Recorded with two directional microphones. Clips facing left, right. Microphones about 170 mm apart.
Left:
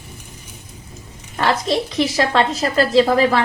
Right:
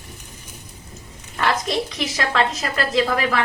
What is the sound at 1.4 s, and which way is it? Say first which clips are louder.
A woman's voice: left 3 dB; 30° left (ahead or behind).